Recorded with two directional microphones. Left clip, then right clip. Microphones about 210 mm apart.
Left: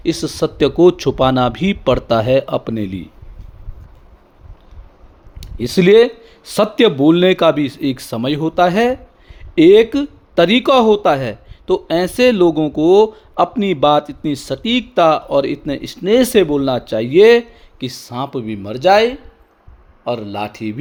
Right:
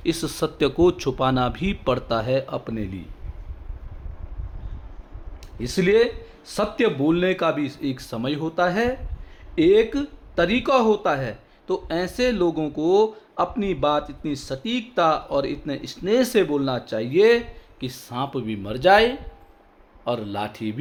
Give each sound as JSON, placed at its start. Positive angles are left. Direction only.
{"t": 0.0, "sound": "a man's voice", "side_deg": 20}
{"t": 5.4, "sound": "a man's voice", "side_deg": 40}